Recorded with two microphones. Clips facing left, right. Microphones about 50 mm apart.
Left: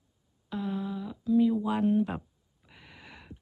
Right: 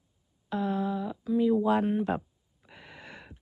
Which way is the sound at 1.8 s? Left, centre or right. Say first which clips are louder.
Left 3 dB; centre.